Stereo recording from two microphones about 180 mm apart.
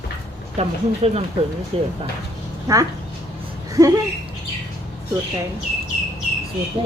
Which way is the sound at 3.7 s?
20° right (ahead or behind).